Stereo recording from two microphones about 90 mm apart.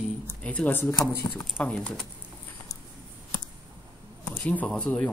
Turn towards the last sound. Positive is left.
turn(degrees=10)  # may be behind; listen again after turning